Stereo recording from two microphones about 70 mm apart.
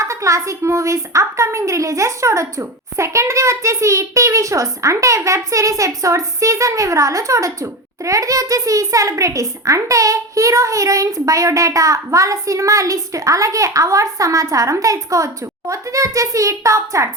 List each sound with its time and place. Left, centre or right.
0.0 s a woman's voice: right